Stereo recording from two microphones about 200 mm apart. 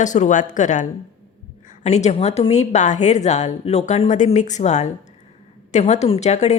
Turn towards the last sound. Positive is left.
turn(degrees=35)  # may be behind; listen again after turning